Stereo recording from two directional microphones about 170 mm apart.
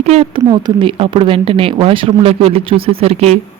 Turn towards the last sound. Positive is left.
turn(degrees=-35)  # may be behind; listen again after turning